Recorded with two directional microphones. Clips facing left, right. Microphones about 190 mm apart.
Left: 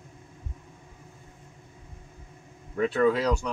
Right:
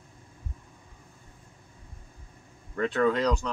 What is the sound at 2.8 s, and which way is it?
Speech, 5° left (ahead or behind).